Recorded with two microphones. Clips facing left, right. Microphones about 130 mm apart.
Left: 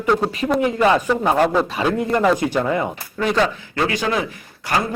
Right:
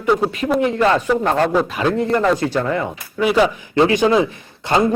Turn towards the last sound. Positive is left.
turn(degrees=-25)  # may be behind; listen again after turning